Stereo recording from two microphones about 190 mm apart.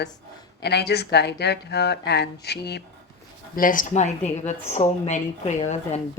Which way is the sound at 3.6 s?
45° left (ahead or behind).